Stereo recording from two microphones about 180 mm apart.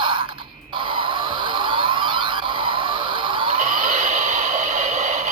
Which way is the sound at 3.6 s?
50° right (ahead or behind).